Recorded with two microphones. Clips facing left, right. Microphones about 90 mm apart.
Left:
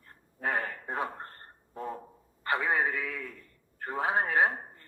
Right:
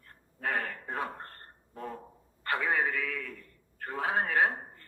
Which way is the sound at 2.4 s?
20° left (ahead or behind).